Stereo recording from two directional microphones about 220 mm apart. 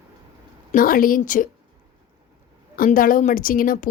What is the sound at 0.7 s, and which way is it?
Speech, 40° left (ahead or behind).